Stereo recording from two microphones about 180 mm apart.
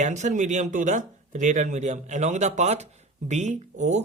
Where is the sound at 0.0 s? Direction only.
40° right (ahead or behind).